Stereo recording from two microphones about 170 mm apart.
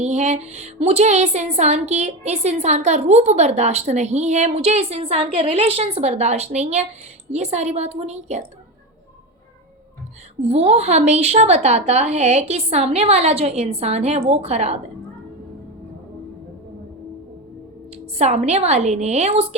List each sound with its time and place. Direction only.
0.0 s speech: 40° right (ahead or behind)
10.4 s speech: 40° right (ahead or behind)
17.9 s speech: 40° right (ahead or behind)